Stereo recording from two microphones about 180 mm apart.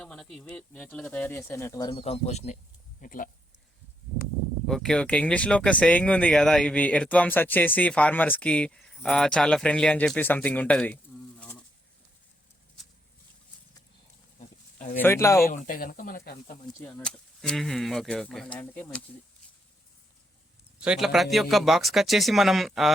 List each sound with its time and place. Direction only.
0.0 s speech: 5° left (ahead or behind); by 2.6 s 40° left (ahead or behind)
3.0 s speech: 50° left (ahead or behind)
4.6 s speech: 5° left (ahead or behind)
14.3 s goat: 40° left (ahead or behind)
14.9 s speech: 15° left (ahead or behind)
15.4 s speech: 50° left (ahead or behind)
16.9 s speech: 5° left (ahead or behind)
20.7 s speech: 5° right (ahead or behind)